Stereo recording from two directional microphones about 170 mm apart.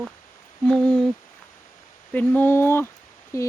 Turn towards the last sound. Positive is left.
turn(degrees=15)  # may be behind; listen again after turning